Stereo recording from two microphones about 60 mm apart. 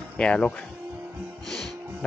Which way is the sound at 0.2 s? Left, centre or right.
Centre.